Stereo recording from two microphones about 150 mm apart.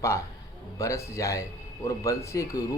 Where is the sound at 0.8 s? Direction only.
20° left (ahead or behind).